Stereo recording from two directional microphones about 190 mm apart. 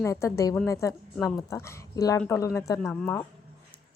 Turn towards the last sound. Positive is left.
turn(degrees=10)  # may be behind; listen again after turning